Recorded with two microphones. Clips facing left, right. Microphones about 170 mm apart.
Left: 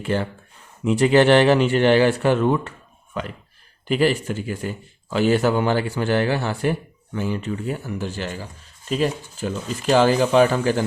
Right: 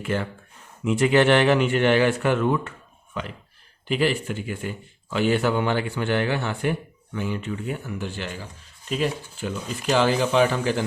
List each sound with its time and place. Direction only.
0.0 s a man's voice: 30° left (ahead or behind)
3.1 s a man's voice: 45° left (ahead or behind)